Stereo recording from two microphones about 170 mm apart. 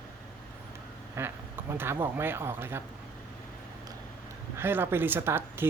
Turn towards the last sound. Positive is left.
turn(degrees=-15)  # may be behind; listen again after turning